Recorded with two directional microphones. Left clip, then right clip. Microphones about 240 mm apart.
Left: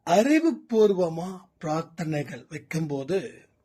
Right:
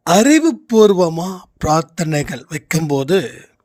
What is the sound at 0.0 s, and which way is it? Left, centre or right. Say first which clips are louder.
Speech: right 9 dB; right.